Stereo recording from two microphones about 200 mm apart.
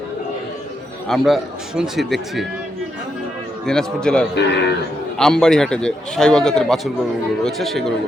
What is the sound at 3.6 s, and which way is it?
Speech, 5° left (ahead or behind).